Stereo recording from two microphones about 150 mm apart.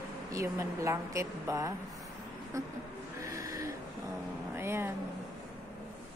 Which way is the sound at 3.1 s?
20° right (ahead or behind).